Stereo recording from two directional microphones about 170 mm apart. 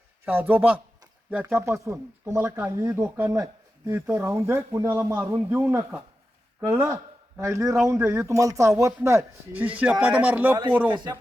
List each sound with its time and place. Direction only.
0.3 s speech: 10° right (ahead or behind)